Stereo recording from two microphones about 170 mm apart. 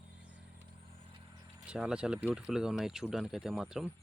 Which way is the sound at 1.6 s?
5° right (ahead or behind).